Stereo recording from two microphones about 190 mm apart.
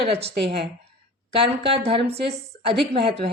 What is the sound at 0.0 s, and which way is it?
Speech, 30° right (ahead or behind).